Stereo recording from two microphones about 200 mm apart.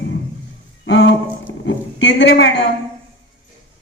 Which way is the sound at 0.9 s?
65° left (ahead or behind).